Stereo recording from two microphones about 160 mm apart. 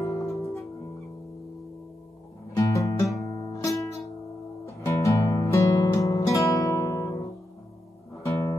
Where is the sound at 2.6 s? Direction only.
20° left (ahead or behind).